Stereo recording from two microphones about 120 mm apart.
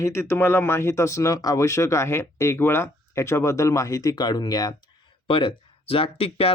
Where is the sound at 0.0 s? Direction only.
20° left (ahead or behind).